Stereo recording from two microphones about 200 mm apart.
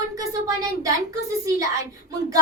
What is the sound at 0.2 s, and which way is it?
Speech, 15° right (ahead or behind).